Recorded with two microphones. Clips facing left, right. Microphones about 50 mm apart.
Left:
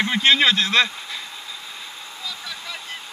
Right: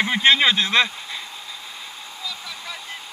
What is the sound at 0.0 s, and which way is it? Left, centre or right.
Speech, centre.